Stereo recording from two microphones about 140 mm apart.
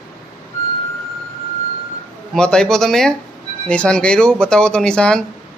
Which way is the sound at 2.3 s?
5° left (ahead or behind).